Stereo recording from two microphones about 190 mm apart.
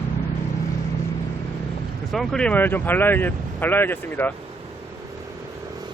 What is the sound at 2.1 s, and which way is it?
Speech, 5° left (ahead or behind).